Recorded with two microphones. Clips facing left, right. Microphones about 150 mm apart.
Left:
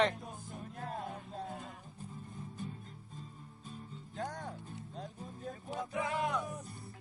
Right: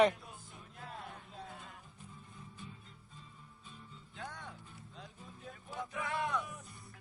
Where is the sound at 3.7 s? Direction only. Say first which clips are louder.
Left 7 dB; 40° left (ahead or behind).